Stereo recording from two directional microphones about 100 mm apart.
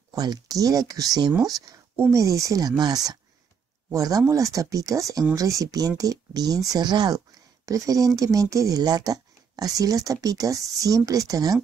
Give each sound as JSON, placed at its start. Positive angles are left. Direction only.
{"t": 0.1, "sound": "speech", "side_deg": -40}